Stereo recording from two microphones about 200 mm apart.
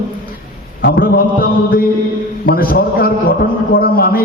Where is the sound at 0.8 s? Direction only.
50° left (ahead or behind).